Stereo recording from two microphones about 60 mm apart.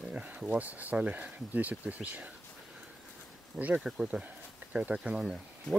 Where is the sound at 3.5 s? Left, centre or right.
Right.